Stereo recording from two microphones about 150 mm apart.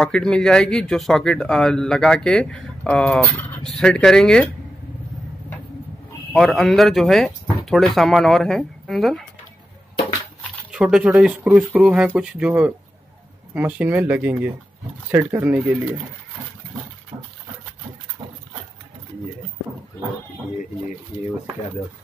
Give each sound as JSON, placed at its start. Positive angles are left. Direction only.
{"t": 0.0, "sound": "a man's voice", "side_deg": 5}
{"t": 6.3, "sound": "a man's voice", "side_deg": 0}
{"t": 10.7, "sound": "a man's voice", "side_deg": -5}
{"t": 17.1, "sound": "a sound", "side_deg": -25}